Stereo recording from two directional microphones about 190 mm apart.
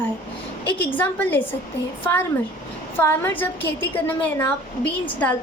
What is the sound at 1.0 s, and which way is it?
Speech, 10° left (ahead or behind).